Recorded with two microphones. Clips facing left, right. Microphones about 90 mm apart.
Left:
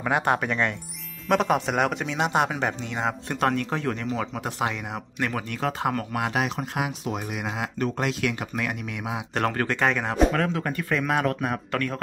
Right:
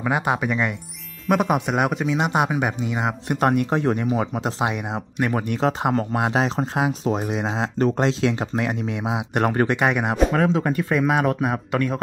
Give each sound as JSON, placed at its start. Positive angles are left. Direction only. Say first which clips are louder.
{"t": 0.0, "sound": "speech", "louder": "right 1 dB", "side_deg": 0}